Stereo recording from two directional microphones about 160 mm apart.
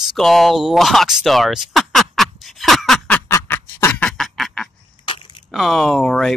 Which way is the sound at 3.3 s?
15° left (ahead or behind).